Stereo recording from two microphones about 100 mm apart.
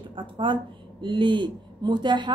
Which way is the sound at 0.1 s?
55° right (ahead or behind).